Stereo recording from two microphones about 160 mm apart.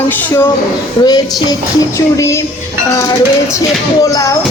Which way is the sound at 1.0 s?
25° left (ahead or behind).